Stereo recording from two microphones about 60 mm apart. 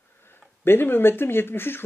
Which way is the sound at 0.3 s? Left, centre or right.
Left.